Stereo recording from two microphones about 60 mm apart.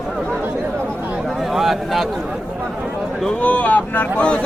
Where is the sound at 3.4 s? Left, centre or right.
Left.